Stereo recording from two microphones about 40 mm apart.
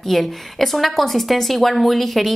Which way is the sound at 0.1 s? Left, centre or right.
Centre.